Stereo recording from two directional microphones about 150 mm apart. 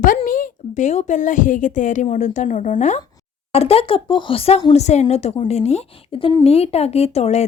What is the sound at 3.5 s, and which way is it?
Speech, 40° left (ahead or behind).